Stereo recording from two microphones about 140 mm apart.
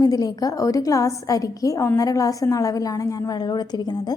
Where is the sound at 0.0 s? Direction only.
25° left (ahead or behind).